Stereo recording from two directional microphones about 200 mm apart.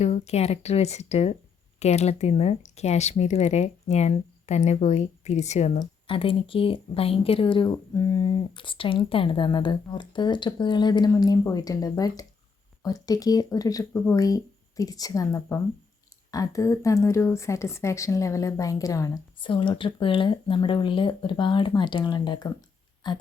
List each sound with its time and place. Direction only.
0.0 s a woman's voice: 30° left (ahead or behind)